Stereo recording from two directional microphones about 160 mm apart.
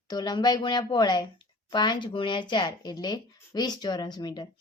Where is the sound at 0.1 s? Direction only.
25° left (ahead or behind).